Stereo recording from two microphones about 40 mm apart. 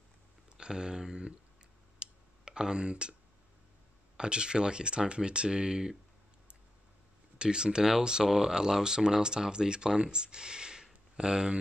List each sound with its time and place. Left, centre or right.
0.6 s speech: centre
2.0 s clicking: right
4.2 s speech: right
7.3 s speech: right